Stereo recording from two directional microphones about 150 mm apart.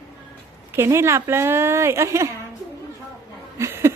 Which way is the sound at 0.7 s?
15° right (ahead or behind).